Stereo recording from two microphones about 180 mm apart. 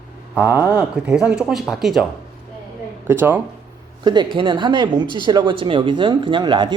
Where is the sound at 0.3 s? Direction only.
10° right (ahead or behind).